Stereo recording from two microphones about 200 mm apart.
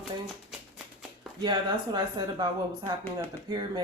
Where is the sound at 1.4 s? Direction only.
20° right (ahead or behind).